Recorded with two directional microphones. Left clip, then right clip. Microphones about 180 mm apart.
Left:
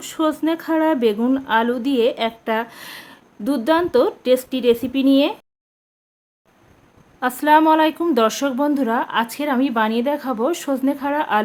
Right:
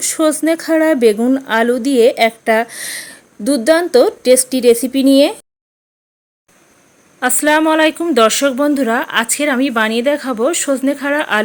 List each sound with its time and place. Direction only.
0.0 s speech: 20° right (ahead or behind)
7.2 s a woman's voice: 10° right (ahead or behind)